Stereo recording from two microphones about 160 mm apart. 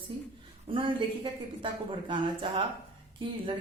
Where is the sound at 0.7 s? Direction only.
30° right (ahead or behind).